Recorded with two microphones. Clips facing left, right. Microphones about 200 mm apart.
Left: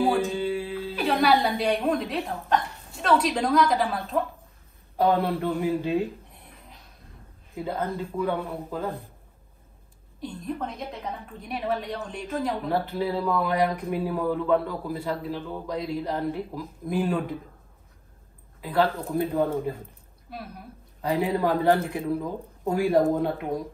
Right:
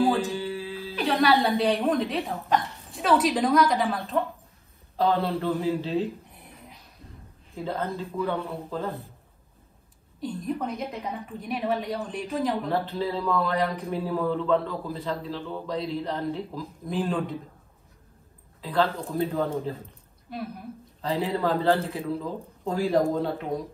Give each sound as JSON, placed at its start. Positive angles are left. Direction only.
{"t": 0.5, "sound": "music", "side_deg": 15}
{"t": 0.9, "sound": "a sound", "side_deg": 0}
{"t": 1.6, "sound": "a woman's voice", "side_deg": 0}
{"t": 4.9, "sound": "a man's voice", "side_deg": 15}
{"t": 7.5, "sound": "a man's voice", "side_deg": 10}
{"t": 10.2, "sound": "a woman's voice", "side_deg": 0}
{"t": 12.9, "sound": "a man's voice", "side_deg": 10}
{"t": 18.6, "sound": "a man's voice", "side_deg": 10}
{"t": 20.2, "sound": "a woman's voice", "side_deg": 0}
{"t": 21.0, "sound": "a man's voice", "side_deg": 15}